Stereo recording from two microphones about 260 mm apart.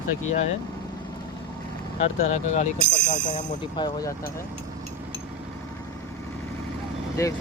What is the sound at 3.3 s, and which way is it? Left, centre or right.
Speech, centre.